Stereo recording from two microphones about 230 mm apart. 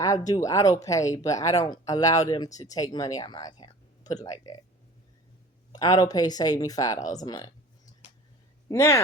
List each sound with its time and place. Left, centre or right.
0.0 s speech: centre
5.7 s speech: centre
8.7 s speech: centre